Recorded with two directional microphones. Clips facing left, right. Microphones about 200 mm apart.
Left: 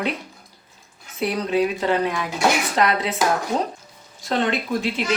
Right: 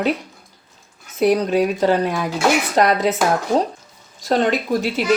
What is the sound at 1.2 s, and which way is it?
Speech, 45° right (ahead or behind).